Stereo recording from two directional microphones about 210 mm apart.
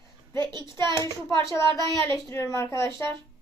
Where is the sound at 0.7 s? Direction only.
20° right (ahead or behind).